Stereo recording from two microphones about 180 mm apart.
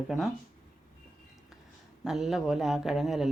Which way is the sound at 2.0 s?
Centre (ahead or behind).